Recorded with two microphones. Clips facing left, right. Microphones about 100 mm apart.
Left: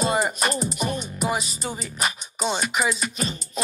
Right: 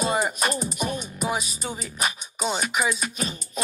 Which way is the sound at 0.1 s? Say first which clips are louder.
Left 1 dB; centre (ahead or behind).